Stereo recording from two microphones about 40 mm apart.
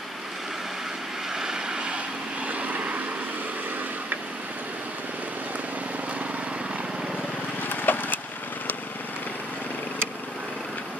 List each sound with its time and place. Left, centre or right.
1.4 s vehicle: centre
2.4 s vehicle: right
7.7 s a sound: left